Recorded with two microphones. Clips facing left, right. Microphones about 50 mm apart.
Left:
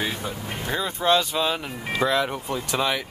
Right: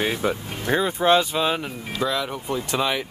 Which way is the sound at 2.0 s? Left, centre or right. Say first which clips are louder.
Left 2 dB; centre.